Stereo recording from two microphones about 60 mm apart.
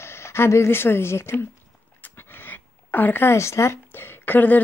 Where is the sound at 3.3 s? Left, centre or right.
Left.